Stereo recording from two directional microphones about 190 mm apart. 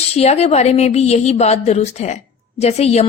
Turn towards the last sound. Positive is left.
turn(degrees=35)  # may be behind; listen again after turning